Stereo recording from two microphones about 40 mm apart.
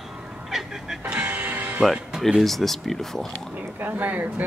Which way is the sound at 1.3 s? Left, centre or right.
Right.